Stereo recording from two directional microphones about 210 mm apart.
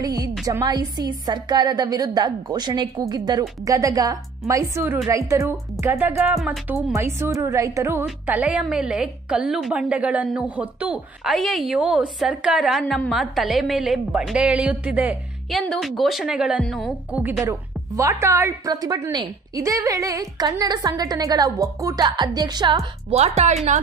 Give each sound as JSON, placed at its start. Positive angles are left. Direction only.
{"t": 0.0, "sound": "a woman's voice", "side_deg": -15}
{"t": 6.9, "sound": "a woman's voice", "side_deg": -10}